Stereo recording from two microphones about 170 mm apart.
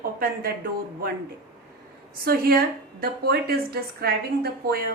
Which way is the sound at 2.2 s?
60° right (ahead or behind).